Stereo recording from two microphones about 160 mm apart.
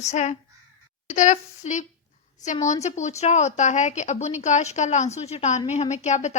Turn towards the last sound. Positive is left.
turn(degrees=45)  # may be behind; listen again after turning